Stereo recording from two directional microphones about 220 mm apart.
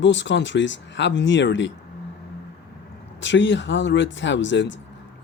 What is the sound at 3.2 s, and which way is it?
Speech, 55° left (ahead or behind).